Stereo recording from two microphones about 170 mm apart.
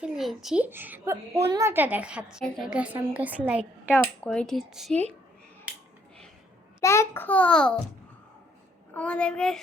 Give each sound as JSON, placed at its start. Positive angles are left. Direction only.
{"t": 0.0, "sound": "a child's voice", "side_deg": 0}
{"t": 3.8, "sound": "speech", "side_deg": 10}
{"t": 6.8, "sound": "a child's voice", "side_deg": 15}
{"t": 8.9, "sound": "speech", "side_deg": 5}